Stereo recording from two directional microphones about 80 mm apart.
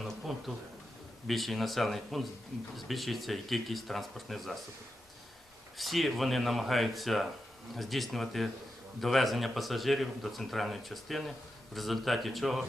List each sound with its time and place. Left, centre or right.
0.0 s a sound: centre
1.3 s a man's voice: centre
5.7 s a man's voice: centre